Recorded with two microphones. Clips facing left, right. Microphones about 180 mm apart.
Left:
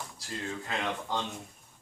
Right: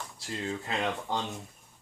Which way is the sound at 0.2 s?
20° right (ahead or behind).